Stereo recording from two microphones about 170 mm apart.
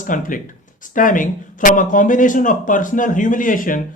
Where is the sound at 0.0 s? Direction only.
50° left (ahead or behind).